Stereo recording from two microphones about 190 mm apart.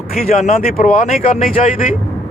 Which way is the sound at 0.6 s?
45° left (ahead or behind).